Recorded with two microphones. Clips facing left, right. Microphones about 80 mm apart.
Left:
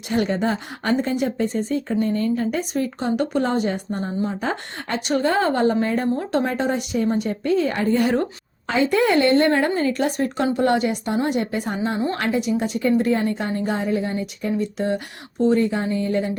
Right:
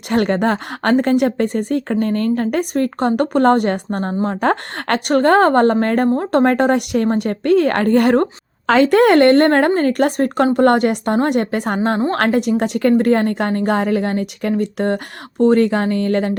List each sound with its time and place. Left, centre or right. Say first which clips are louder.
0.1 s a woman's voice: right 5 dB; right
8.6 s a woman's voice: right 7 dB; right